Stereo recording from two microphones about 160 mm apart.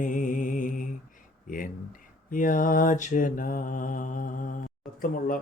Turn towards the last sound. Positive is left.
turn(degrees=60)  # may be behind; listen again after turning